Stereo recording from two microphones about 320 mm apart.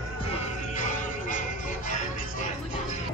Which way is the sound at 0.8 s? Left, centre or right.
Left.